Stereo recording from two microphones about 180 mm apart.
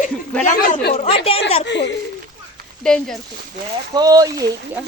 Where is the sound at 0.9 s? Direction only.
35° left (ahead or behind).